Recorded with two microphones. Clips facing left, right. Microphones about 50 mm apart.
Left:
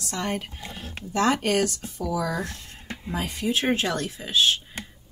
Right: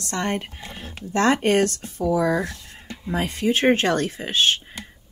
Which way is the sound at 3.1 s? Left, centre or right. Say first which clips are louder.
Right 5 dB; right.